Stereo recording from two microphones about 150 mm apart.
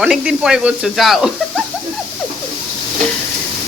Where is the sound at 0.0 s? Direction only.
5° right (ahead or behind).